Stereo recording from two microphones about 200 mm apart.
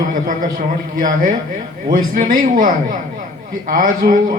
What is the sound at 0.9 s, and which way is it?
A man's voice, 45° right (ahead or behind).